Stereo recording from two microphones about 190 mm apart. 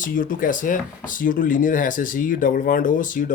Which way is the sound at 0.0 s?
45° left (ahead or behind).